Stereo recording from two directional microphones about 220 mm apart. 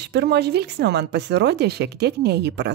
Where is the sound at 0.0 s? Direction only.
50° right (ahead or behind).